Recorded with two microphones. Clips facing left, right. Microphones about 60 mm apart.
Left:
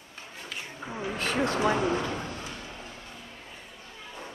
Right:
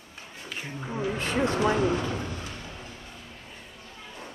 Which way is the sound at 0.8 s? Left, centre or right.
Centre.